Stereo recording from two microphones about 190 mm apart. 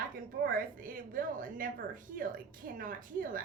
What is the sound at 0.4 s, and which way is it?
A woman's voice, 45° right (ahead or behind).